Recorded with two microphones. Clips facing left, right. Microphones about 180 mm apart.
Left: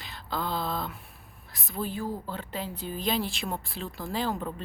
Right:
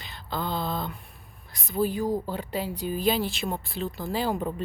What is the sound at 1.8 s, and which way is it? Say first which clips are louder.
Speech: right 6 dB; 15° right (ahead or behind).